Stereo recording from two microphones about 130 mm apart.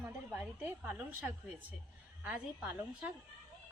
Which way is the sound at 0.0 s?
15° right (ahead or behind).